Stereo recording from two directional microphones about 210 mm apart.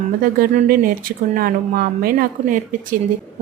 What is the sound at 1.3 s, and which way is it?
Speech, 45° right (ahead or behind).